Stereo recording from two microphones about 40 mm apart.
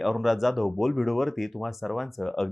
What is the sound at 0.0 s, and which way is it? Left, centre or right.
Speech, centre.